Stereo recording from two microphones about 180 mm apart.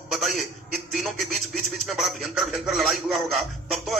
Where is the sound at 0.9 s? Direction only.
Centre (ahead or behind).